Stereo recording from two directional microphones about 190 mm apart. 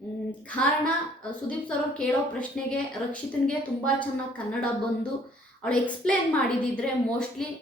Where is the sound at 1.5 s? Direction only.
5° left (ahead or behind).